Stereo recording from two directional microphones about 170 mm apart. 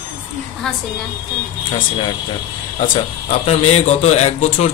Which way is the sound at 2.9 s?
35° left (ahead or behind).